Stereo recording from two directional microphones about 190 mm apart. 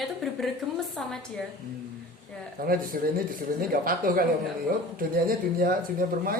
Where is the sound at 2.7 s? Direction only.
50° right (ahead or behind).